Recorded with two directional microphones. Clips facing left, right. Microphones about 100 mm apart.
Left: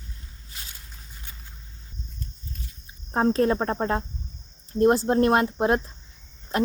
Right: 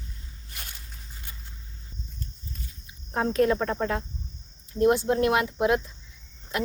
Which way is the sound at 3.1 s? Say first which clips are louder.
Left 2 dB; 35° left (ahead or behind).